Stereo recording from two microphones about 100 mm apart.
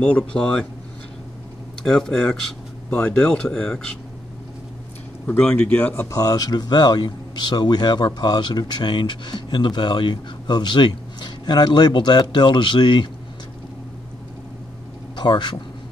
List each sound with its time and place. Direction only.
0.0 s speech: 10° left (ahead or behind)
1.9 s speech: 5° left (ahead or behind)
5.2 s speech: 10° left (ahead or behind)
6.0 s a man's voice: 35° left (ahead or behind); by 13.1 s 50° left (ahead or behind)
15.1 s speech: 50° left (ahead or behind)